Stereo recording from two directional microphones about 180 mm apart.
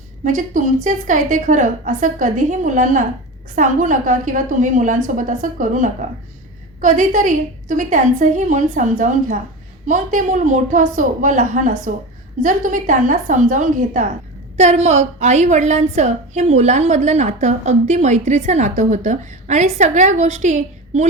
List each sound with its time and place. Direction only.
0.3 s a woman's voice: 45° right (ahead or behind)